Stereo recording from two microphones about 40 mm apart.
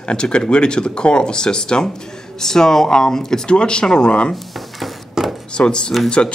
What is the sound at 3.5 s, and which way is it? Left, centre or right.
Speech, left.